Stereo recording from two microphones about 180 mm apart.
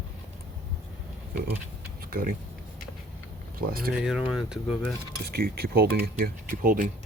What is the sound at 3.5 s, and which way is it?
Speech, 55° right (ahead or behind).